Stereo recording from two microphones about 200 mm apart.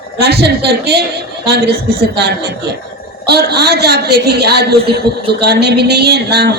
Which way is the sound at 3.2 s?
55° right (ahead or behind).